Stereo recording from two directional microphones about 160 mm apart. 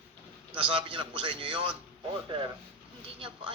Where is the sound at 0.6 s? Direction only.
30° right (ahead or behind).